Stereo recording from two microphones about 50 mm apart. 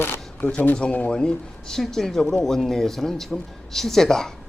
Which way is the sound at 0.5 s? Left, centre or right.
Left.